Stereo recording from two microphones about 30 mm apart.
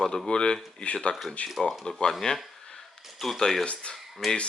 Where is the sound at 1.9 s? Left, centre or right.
Left.